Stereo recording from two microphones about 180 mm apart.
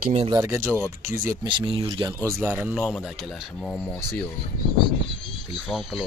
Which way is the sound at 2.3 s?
10° right (ahead or behind).